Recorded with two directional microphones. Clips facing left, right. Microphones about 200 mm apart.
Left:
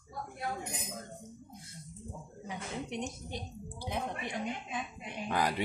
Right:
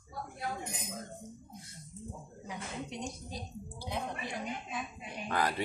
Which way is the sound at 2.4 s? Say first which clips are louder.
Left 2 dB; 25° left (ahead or behind).